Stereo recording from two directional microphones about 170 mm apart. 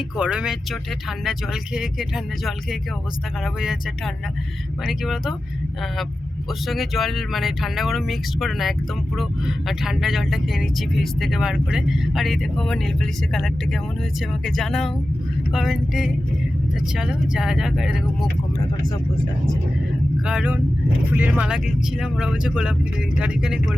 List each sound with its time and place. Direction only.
0.2 s speech: 5° right (ahead or behind)
6.7 s speech: centre (ahead or behind)
20.2 s speech: 5° right (ahead or behind)